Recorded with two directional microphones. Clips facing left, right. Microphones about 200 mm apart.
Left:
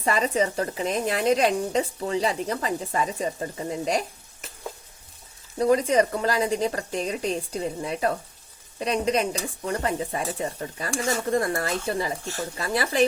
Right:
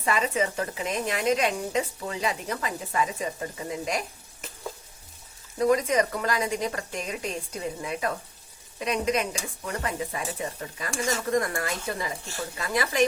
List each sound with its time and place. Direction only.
0.0 s a woman's voice: 35° left (ahead or behind)
5.5 s a woman's voice: 30° left (ahead or behind)